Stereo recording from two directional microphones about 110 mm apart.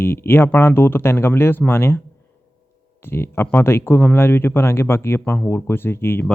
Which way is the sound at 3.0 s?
20° left (ahead or behind).